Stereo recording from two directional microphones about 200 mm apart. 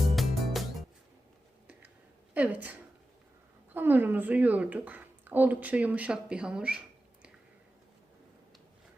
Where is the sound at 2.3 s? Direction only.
5° right (ahead or behind).